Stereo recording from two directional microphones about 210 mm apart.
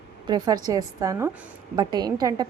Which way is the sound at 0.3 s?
20° right (ahead or behind).